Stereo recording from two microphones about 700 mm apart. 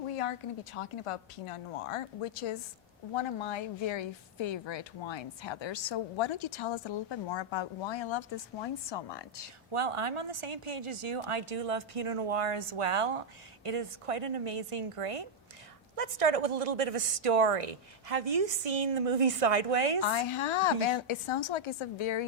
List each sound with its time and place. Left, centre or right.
0.1 s a woman's voice: left
9.7 s a woman's voice: right
20.1 s a woman's voice: left